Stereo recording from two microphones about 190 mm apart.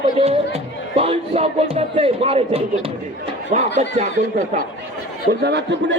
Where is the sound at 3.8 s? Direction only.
40° right (ahead or behind).